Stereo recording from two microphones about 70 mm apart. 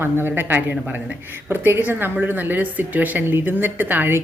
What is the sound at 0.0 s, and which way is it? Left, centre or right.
A woman's voice, right.